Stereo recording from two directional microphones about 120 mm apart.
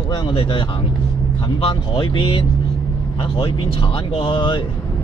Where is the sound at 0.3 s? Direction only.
45° left (ahead or behind).